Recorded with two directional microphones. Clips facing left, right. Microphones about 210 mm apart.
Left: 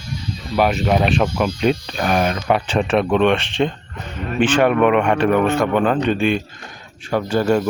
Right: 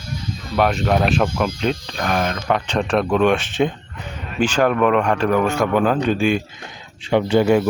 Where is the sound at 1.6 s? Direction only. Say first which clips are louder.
Left 4 dB; 15° left (ahead or behind); by 3.5 s centre (ahead or behind).